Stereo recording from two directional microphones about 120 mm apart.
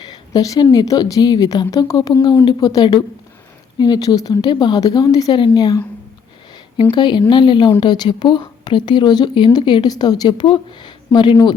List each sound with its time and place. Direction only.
0.0 s speech: 35° left (ahead or behind)
6.9 s speech: 40° left (ahead or behind)